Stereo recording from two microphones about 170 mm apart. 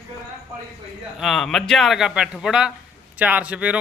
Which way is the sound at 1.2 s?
Centre (ahead or behind).